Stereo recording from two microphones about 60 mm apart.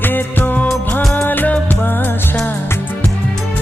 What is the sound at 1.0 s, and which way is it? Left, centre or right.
Music, centre.